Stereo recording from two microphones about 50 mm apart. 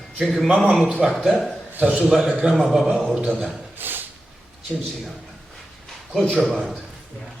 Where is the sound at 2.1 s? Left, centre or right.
Centre.